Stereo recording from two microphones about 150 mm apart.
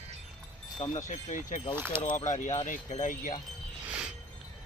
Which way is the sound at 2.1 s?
55° left (ahead or behind).